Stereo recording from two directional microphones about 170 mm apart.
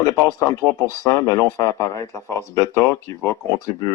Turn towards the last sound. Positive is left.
turn(degrees=20)  # may be behind; listen again after turning